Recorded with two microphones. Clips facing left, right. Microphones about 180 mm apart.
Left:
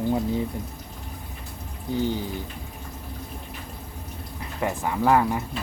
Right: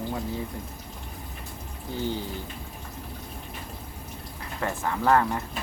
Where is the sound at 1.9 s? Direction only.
15° left (ahead or behind).